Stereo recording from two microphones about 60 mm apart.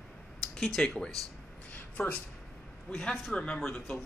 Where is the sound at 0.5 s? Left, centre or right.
Centre.